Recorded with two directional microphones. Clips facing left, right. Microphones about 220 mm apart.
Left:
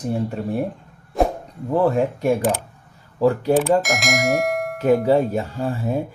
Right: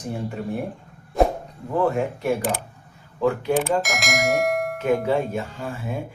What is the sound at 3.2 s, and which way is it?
Speech, 35° left (ahead or behind).